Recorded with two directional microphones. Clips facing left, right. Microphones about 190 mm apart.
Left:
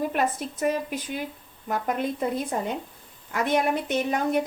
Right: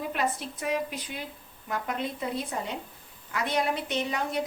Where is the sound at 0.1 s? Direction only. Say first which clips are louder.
Left 4 dB; 45° left (ahead or behind).